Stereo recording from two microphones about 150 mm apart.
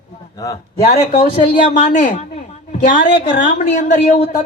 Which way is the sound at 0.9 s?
50° left (ahead or behind).